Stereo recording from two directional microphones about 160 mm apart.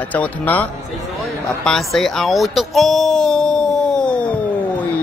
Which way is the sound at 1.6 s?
Centre (ahead or behind).